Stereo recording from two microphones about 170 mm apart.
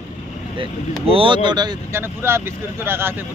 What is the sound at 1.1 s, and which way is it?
Speech, 30° right (ahead or behind).